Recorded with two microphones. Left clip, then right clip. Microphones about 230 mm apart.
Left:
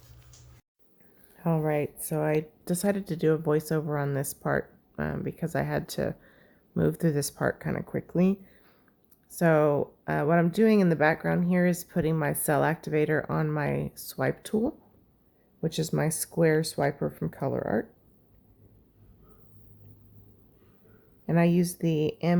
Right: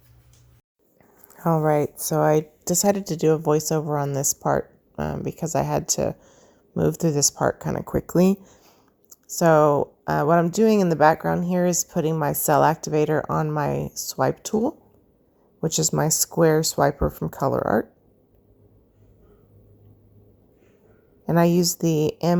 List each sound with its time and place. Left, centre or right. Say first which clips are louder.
1.4 s speech: right 8 dB; centre
8.6 s a sound: right 6 dB; centre
9.3 s speech: right 6 dB; centre
21.3 s speech: right 6 dB; centre